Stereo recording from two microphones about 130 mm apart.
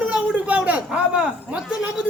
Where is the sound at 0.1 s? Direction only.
10° right (ahead or behind).